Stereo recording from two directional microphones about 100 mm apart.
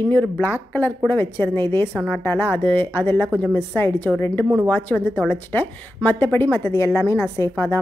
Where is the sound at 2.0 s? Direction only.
10° left (ahead or behind).